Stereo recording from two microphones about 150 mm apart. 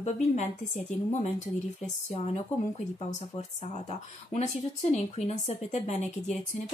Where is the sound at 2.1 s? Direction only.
40° left (ahead or behind).